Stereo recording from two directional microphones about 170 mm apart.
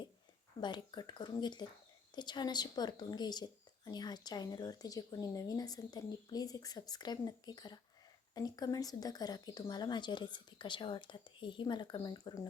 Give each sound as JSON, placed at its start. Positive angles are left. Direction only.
{"t": 0.6, "sound": "speech", "side_deg": 25}